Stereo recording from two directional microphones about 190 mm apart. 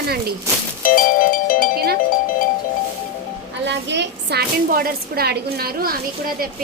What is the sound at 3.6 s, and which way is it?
A woman's voice, 65° right (ahead or behind).